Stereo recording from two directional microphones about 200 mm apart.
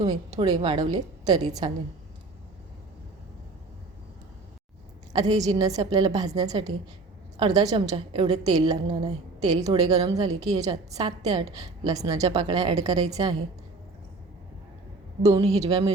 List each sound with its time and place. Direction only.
0.0 s a woman's voice: 20° right (ahead or behind)
5.1 s a woman's voice: 20° right (ahead or behind)
15.3 s speech: 30° right (ahead or behind)
15.5 s a woman's voice: 15° right (ahead or behind)